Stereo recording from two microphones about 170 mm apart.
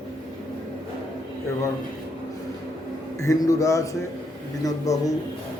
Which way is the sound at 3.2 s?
20° left (ahead or behind).